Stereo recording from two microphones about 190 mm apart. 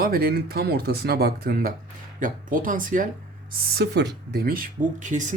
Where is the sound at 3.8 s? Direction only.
55° right (ahead or behind); by 5.2 s 40° right (ahead or behind).